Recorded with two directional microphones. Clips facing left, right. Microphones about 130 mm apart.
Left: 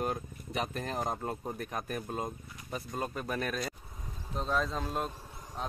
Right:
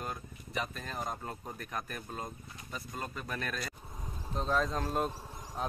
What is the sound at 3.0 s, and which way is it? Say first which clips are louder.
Speech: left 5 dB; 10° left (ahead or behind).